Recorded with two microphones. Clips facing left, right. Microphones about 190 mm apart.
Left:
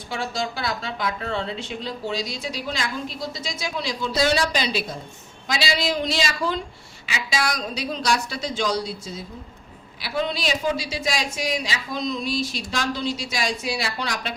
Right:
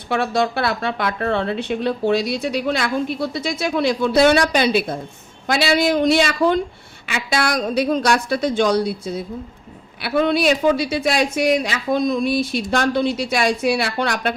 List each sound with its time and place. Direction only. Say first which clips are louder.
0.1 s a woman's voice: right 9 dB; 60° right (ahead or behind)